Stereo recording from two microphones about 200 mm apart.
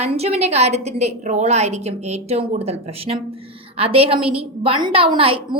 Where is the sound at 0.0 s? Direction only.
30° right (ahead or behind).